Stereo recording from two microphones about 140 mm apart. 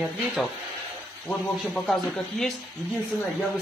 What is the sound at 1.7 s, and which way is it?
Speech, centre (ahead or behind).